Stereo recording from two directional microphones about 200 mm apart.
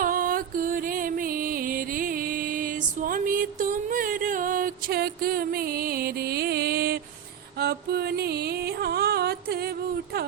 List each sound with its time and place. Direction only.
0.0 s music: 45° right (ahead or behind)